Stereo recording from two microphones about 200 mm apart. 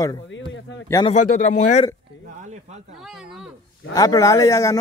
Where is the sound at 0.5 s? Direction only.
65° left (ahead or behind).